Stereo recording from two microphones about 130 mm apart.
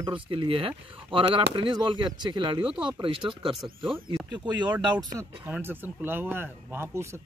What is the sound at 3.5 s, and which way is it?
Speech, centre (ahead or behind).